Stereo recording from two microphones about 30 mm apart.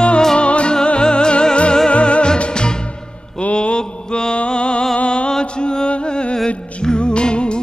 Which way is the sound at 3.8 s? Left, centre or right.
Left.